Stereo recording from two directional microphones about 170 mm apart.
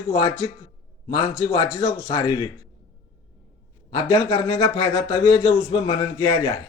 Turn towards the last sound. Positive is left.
turn(degrees=20)  # may be behind; listen again after turning